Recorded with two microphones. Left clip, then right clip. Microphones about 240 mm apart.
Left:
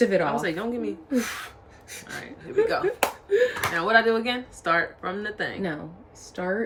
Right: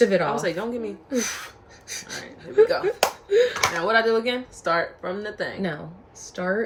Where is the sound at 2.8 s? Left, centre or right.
Centre.